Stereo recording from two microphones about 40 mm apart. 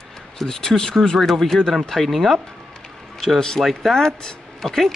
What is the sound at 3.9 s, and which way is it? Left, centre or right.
Speech, centre.